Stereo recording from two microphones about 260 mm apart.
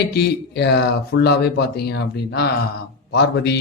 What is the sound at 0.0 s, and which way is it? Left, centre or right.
Speech, left.